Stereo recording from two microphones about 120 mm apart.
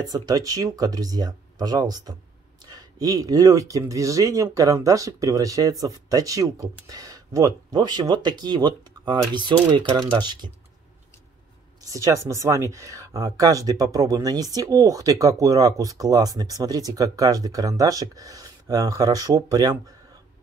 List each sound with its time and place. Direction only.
0.0 s speech: 30° right (ahead or behind)
11.8 s speech: 25° right (ahead or behind)